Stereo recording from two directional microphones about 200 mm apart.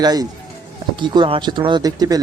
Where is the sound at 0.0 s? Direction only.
20° right (ahead or behind).